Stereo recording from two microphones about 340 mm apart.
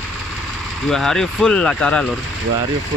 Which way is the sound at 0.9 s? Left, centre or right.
Centre.